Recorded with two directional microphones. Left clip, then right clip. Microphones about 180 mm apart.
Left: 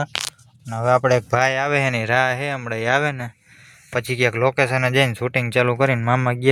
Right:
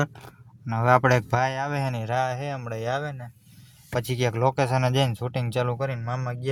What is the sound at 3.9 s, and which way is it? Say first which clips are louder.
Speech: left 7 dB; centre (ahead or behind).